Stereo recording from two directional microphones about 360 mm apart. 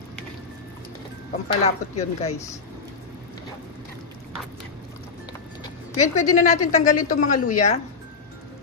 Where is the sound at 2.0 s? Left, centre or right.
Centre.